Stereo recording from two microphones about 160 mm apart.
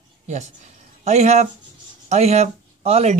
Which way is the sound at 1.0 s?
45° right (ahead or behind).